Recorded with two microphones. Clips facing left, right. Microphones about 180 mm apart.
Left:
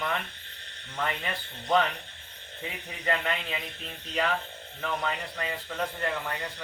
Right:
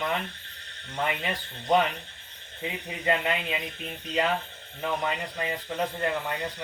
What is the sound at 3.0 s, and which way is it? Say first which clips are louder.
Speech: right 3 dB; 15° right (ahead or behind).